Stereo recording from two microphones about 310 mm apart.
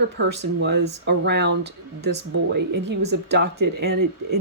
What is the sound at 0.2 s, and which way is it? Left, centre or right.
Speech, right.